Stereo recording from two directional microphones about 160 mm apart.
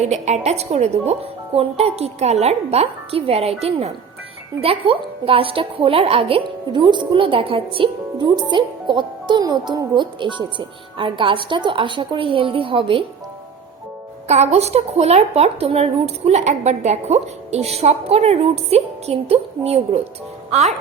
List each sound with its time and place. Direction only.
0.0 s a woman's voice: 45° right (ahead or behind)
14.3 s a woman's voice: 45° right (ahead or behind)